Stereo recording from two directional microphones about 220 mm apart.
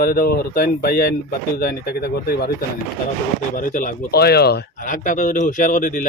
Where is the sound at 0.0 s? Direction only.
45° left (ahead or behind).